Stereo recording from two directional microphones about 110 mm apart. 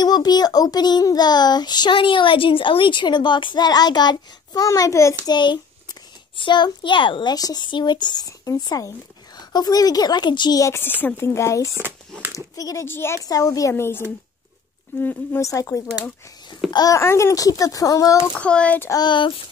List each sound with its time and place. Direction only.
0.0 s speech: 40° left (ahead or behind)
4.6 s a child's voice: 30° left (ahead or behind)
5.2 s a child's voice: 40° left (ahead or behind)
7.3 s speech: 35° left (ahead or behind)
10.6 s a child's voice: 20° left (ahead or behind)
11.7 s speech: 20° right (ahead or behind)
12.5 s speech: 35° left (ahead or behind)
12.8 s a child's voice: 20° left (ahead or behind)
15.4 s a child's voice: 30° left (ahead or behind)
18.3 s speech: 10° left (ahead or behind)
18.9 s a child's voice: 40° left (ahead or behind)